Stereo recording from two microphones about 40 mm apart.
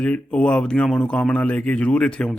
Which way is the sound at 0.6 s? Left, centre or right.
Left.